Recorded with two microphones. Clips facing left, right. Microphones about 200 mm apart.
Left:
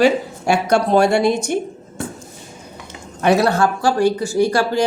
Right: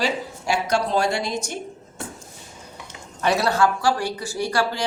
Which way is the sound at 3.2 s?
55° left (ahead or behind).